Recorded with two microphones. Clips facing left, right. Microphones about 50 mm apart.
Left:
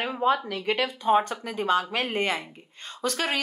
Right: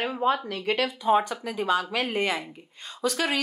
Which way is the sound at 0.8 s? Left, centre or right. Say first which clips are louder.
Even; left.